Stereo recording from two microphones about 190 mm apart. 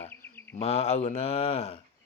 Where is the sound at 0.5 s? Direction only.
35° left (ahead or behind).